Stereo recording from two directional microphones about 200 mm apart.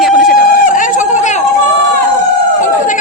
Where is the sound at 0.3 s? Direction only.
40° left (ahead or behind).